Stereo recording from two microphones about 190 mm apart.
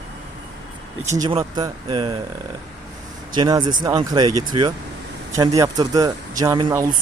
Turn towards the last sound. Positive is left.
turn(degrees=-20)  # may be behind; listen again after turning